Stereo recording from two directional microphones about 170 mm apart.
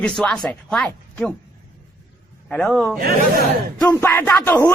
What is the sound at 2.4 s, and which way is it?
A man's voice, 5° left (ahead or behind).